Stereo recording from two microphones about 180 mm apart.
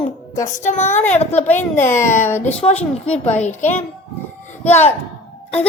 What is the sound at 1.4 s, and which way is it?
A child's voice, 10° left (ahead or behind).